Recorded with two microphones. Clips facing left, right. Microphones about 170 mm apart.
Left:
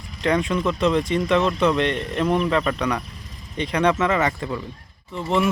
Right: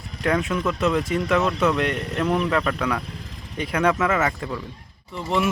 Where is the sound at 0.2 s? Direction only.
5° right (ahead or behind).